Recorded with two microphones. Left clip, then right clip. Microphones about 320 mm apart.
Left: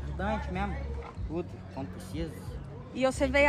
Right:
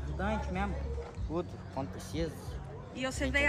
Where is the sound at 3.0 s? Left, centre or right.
Centre.